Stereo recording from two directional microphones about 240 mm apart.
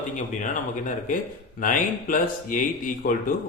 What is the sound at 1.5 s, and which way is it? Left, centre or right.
Speech, left.